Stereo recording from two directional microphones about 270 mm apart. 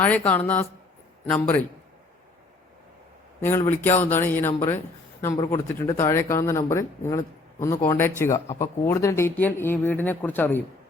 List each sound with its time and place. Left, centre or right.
0.3 s speech: centre
3.4 s speech: centre